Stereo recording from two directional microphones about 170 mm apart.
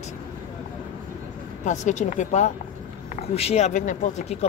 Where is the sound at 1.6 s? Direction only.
45° left (ahead or behind).